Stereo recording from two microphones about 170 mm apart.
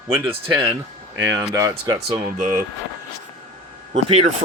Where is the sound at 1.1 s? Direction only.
15° right (ahead or behind).